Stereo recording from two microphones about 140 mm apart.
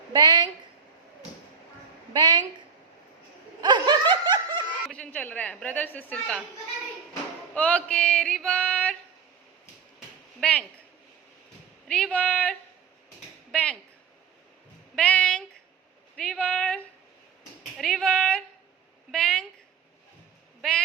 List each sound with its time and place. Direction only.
0.1 s a woman's voice: 30° right (ahead or behind)
2.1 s a woman's voice: 30° right (ahead or behind)
3.6 s snicker: 30° right (ahead or behind)
4.9 s a woman's voice: 10° left (ahead or behind)
7.5 s a woman's voice: 10° left (ahead or behind)
10.4 s speech: 5° left (ahead or behind)
11.9 s a woman's voice: 5° left (ahead or behind)
13.5 s a sound: 5° left (ahead or behind)
14.9 s a sound: 5° left (ahead or behind)
16.1 s speech: 5° left (ahead or behind)
19.1 s a sound: 5° left (ahead or behind)
20.6 s bleat: 5° left (ahead or behind)